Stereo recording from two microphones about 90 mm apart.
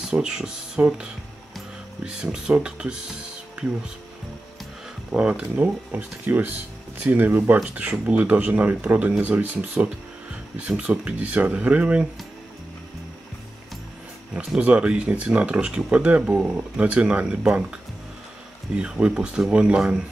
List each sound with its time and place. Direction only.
0.1 s speech: 10° right (ahead or behind)
5.1 s speech: 15° right (ahead or behind)
14.3 s speech: 10° right (ahead or behind)
18.8 s speech: 15° right (ahead or behind)